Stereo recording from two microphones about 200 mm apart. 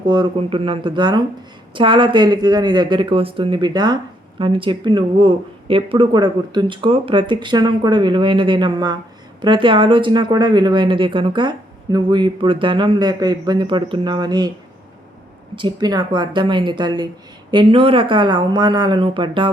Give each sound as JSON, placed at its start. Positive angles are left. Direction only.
{"t": 0.0, "sound": "speech", "side_deg": -20}
{"t": 15.5, "sound": "speech", "side_deg": -20}